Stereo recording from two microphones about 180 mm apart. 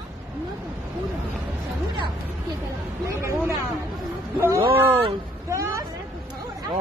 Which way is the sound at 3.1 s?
15° right (ahead or behind).